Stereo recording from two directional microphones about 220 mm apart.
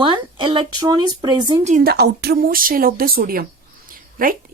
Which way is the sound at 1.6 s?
40° right (ahead or behind).